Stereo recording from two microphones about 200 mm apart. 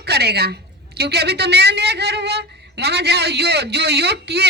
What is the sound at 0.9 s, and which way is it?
A woman's voice, 55° right (ahead or behind).